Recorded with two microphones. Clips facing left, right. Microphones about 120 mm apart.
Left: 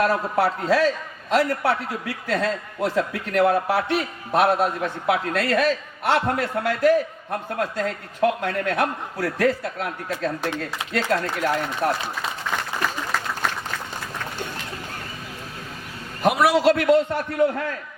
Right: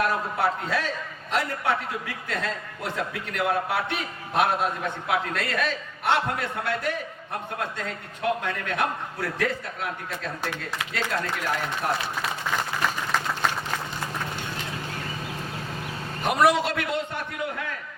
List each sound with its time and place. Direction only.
0.0 s a man's voice: 40° left (ahead or behind)
16.2 s a man's voice: 5° left (ahead or behind)
16.6 s a man's voice: 40° left (ahead or behind)